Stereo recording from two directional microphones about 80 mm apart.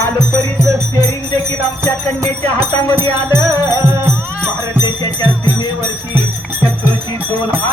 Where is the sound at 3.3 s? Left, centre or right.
Right.